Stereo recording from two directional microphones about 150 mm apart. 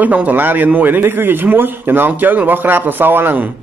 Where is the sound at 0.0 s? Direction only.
10° right (ahead or behind).